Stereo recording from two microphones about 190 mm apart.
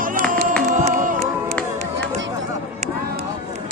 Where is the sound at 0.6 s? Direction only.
45° right (ahead or behind).